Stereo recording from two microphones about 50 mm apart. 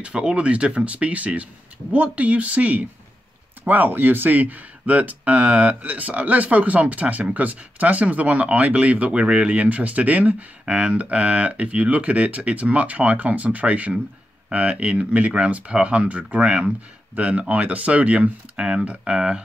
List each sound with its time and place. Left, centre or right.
0.0 s speech: centre